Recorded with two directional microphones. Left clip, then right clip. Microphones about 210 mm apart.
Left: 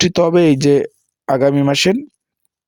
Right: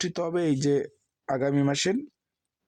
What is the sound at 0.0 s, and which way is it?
Speech, 35° left (ahead or behind).